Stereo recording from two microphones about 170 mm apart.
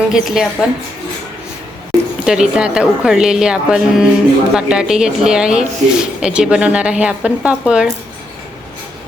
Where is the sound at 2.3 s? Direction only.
5° right (ahead or behind).